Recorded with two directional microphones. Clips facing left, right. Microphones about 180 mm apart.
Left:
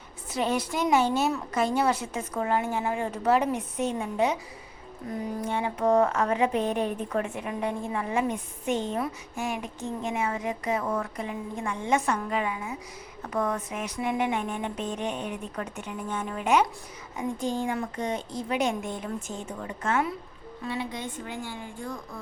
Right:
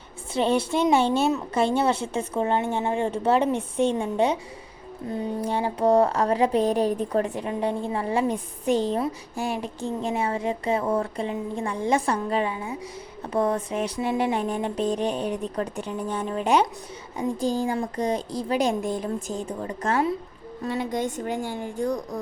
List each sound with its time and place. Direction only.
0.3 s a woman's voice: 30° right (ahead or behind)
20.7 s speech: 45° right (ahead or behind)